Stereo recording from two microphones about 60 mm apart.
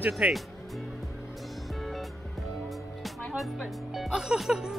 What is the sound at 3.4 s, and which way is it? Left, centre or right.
Speech, centre.